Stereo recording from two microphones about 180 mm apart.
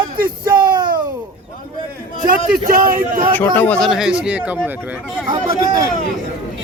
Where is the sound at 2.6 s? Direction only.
50° right (ahead or behind).